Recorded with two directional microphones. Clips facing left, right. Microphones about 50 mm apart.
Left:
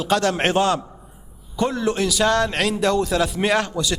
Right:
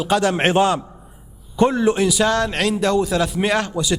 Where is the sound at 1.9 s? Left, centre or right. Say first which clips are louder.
Right 3 dB; centre.